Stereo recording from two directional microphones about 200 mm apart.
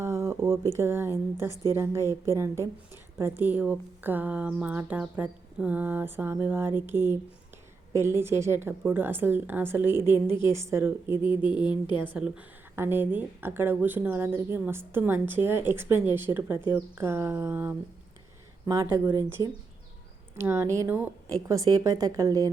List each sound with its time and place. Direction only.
0.0 s a woman's voice: 15° right (ahead or behind)
11.6 s a woman's voice: 20° left (ahead or behind)
12.0 s a woman's voice: 5° right (ahead or behind)